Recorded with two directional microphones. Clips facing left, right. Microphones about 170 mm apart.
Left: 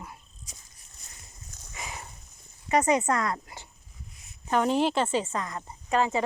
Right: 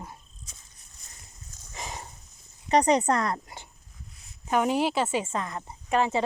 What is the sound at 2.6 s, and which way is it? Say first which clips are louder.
Speech: right 2 dB; 35° right (ahead or behind).